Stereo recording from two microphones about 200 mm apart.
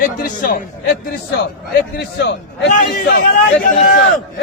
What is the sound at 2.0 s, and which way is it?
Speech, 55° left (ahead or behind).